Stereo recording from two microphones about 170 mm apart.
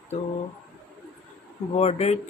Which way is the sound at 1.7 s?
40° left (ahead or behind).